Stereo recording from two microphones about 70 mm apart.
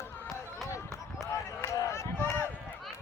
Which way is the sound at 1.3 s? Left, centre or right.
Left.